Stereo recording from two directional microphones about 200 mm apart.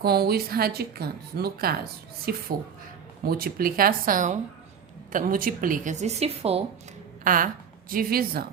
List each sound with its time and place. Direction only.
0.0 s a woman's voice: 50° right (ahead or behind); by 6.6 s 30° right (ahead or behind)
7.3 s a woman's voice: 45° right (ahead or behind)